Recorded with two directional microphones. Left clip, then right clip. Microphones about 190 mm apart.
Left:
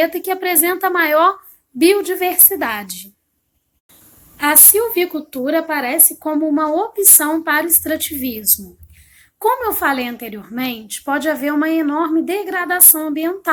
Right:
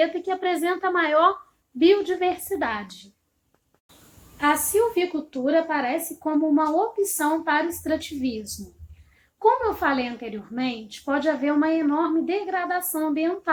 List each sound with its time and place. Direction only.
0.0 s a woman's voice: 40° left (ahead or behind)
4.4 s a woman's voice: 40° left (ahead or behind)
9.4 s a woman's voice: 40° left (ahead or behind)